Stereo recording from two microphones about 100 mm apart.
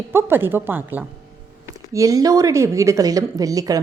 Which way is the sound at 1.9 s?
35° right (ahead or behind).